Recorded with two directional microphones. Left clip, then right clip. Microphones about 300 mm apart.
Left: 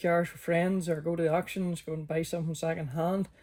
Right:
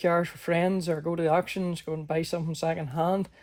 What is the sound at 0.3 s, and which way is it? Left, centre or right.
Speech, right.